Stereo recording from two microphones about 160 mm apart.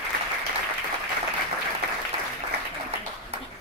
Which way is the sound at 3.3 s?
40° right (ahead or behind).